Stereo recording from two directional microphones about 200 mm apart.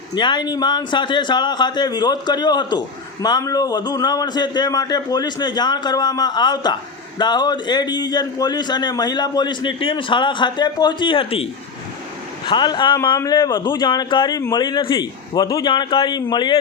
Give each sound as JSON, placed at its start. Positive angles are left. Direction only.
{"t": 0.1, "sound": "a man's voice", "side_deg": 20}
{"t": 12.5, "sound": "a man's voice", "side_deg": 20}